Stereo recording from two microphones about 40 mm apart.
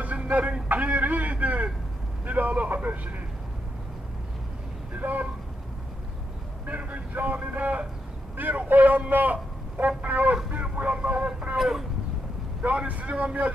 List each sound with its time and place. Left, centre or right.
0.0 s a sound: right
2.2 s a man's voice: right
4.9 s speech: right
6.6 s vehicle: right
8.4 s a man's voice: right
10.5 s vehicle: right
11.5 s a sound: centre
12.6 s speech: right